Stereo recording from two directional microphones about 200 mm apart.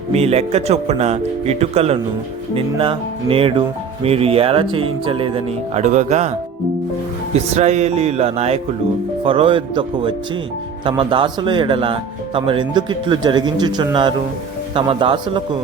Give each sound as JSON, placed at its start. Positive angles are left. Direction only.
{"t": 0.1, "sound": "speech", "side_deg": -30}
{"t": 7.3, "sound": "speech", "side_deg": -35}